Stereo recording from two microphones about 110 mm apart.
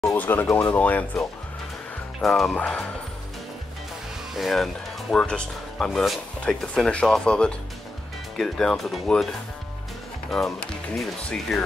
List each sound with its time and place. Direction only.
0.1 s speech: 15° left (ahead or behind)
2.2 s speech: centre (ahead or behind)
4.3 s speech: centre (ahead or behind)
10.3 s speech: 5° left (ahead or behind)